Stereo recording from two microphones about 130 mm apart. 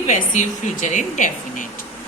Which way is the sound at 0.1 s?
70° left (ahead or behind).